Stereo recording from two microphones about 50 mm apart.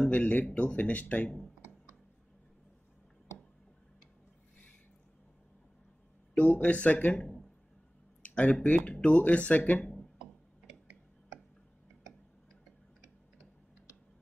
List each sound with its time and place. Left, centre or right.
0.0 s speech: left
6.3 s speech: left
7.2 s a sound: centre
8.2 s speech: left